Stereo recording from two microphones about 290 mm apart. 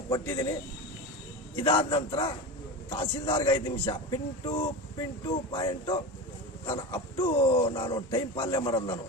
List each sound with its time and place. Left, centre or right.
0.1 s speech: centre
1.5 s speech: centre